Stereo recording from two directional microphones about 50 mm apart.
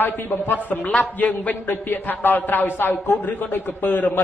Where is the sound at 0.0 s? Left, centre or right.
Left.